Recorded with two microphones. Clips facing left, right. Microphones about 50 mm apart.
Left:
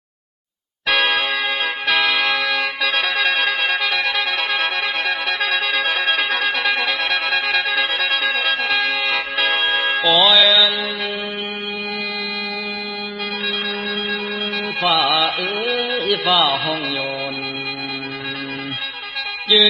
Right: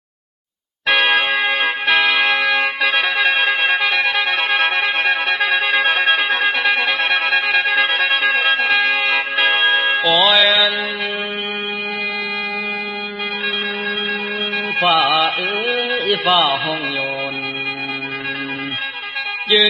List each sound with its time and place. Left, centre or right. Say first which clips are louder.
0.9 s music: right 3 dB; right
2.9 s music: right 1 dB; centre; by 10.7 s right
14.8 s music: right 3 dB; right
15.9 s music: right 3 dB; right
19.5 s music: right 1 dB; right